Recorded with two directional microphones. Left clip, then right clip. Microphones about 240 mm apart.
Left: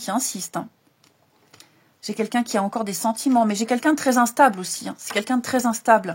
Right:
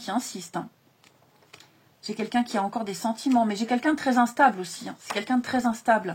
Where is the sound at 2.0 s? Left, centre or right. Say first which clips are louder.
Left 3 dB; left.